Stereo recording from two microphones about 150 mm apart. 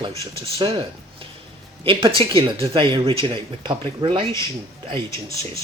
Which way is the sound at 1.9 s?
35° right (ahead or behind).